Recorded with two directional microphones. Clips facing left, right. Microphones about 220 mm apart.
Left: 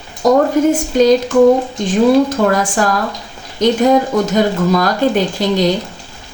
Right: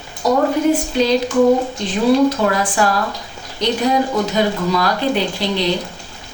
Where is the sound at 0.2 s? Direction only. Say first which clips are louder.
Left 4 dB; 45° left (ahead or behind).